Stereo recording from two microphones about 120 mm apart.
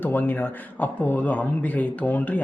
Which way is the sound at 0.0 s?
15° left (ahead or behind).